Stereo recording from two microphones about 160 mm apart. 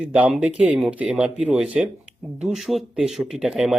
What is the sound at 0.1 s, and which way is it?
Speech, 10° right (ahead or behind).